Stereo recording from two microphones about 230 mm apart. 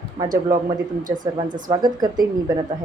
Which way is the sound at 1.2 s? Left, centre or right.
Centre.